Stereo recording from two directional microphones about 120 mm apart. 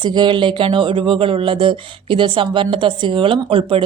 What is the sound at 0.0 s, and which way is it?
Speech, 40° right (ahead or behind).